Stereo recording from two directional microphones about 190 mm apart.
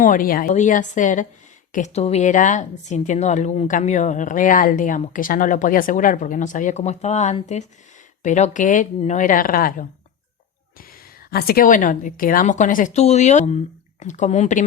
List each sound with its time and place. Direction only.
0.0 s a woman's voice: 45° left (ahead or behind)